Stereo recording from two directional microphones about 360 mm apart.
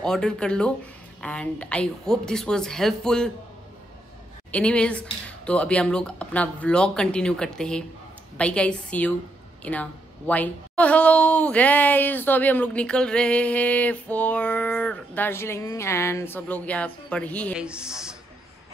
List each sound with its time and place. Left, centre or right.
0.0 s a woman's voice: centre
4.5 s a woman's voice: centre